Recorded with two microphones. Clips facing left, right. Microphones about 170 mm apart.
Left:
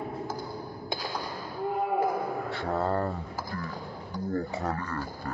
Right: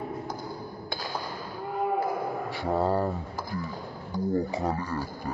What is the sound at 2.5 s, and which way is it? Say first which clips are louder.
Speech: right 4 dB; 10° right (ahead or behind).